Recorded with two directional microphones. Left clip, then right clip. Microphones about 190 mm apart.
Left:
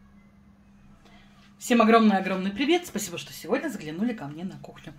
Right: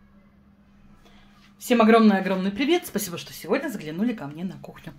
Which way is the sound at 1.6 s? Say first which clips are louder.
Right 2 dB; 10° right (ahead or behind).